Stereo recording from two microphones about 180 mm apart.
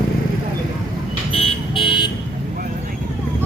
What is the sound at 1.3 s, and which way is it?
Car alarm, 30° left (ahead or behind).